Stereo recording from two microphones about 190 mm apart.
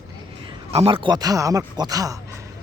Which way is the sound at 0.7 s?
35° right (ahead or behind).